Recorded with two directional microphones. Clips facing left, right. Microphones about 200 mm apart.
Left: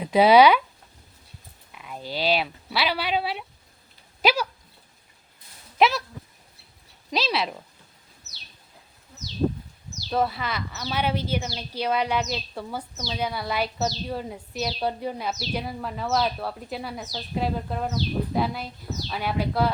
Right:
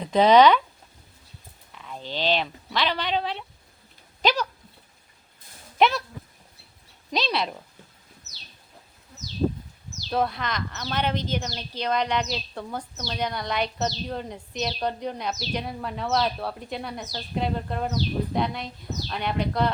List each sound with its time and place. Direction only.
0.0 s speech: 10° left (ahead or behind)
1.7 s speech: 10° left (ahead or behind)
4.2 s a sound: 10° left (ahead or behind)
5.7 s speech: 5° left (ahead or behind)
7.1 s speech: centre (ahead or behind)
10.1 s speech: 5° left (ahead or behind)